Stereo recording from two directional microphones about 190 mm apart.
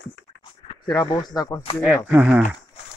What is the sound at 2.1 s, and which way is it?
Speech, 10° right (ahead or behind).